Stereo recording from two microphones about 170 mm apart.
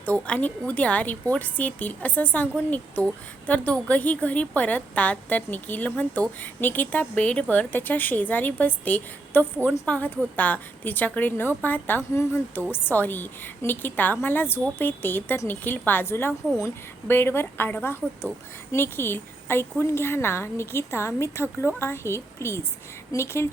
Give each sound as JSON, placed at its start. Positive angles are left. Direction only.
{"t": 0.0, "sound": "a woman's voice", "side_deg": 10}